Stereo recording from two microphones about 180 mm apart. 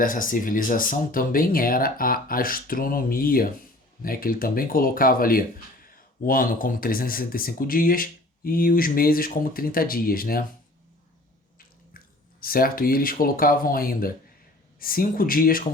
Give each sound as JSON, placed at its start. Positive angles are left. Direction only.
{"t": 0.0, "sound": "speech", "side_deg": 50}
{"t": 12.4, "sound": "speech", "side_deg": 55}